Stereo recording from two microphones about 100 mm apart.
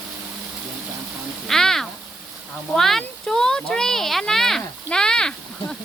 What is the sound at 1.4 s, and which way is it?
Speech, 5° left (ahead or behind).